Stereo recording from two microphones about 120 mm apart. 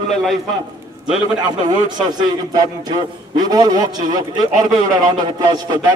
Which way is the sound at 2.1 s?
35° right (ahead or behind).